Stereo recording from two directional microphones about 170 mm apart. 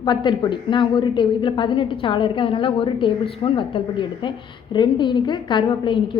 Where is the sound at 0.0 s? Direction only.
25° left (ahead or behind).